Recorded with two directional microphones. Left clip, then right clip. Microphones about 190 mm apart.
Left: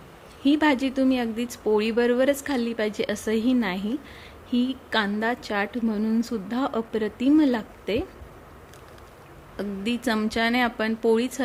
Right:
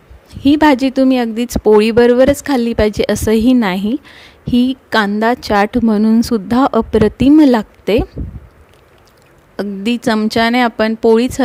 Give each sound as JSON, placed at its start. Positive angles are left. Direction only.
{"t": 0.4, "sound": "speech", "side_deg": -50}
{"t": 9.6, "sound": "speech", "side_deg": -45}